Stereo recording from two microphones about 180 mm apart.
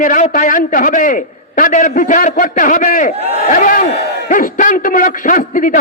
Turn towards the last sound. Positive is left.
turn(degrees=50)  # may be behind; listen again after turning